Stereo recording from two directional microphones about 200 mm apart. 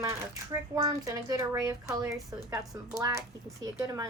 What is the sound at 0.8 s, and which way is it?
Speech, 20° right (ahead or behind).